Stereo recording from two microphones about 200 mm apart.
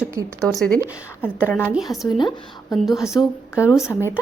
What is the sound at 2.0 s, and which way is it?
Speech, 20° left (ahead or behind).